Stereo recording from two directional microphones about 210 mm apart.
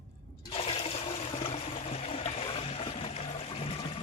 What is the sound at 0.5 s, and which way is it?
Toilet flush, 25° left (ahead or behind).